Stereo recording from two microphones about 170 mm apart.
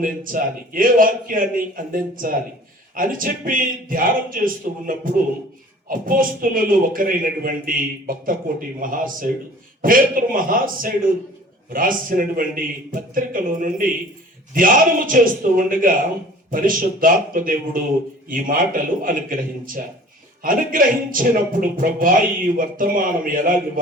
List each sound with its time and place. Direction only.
0.0 s a man's voice: 55° right (ahead or behind)